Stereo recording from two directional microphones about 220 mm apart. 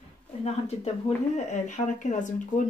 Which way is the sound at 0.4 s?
30° left (ahead or behind).